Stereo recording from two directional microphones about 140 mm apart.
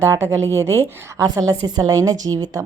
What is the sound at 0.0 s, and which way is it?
A woman's voice, 20° right (ahead or behind).